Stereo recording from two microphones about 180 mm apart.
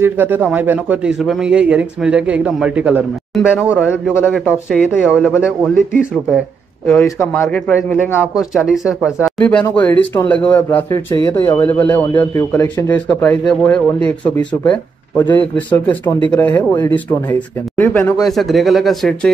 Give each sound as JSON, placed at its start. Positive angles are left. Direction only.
{"t": 0.0, "sound": "a man's voice", "side_deg": -10}
{"t": 7.1, "sound": "speech", "side_deg": 15}
{"t": 8.4, "sound": "speech", "side_deg": 0}
{"t": 9.8, "sound": "speech", "side_deg": 10}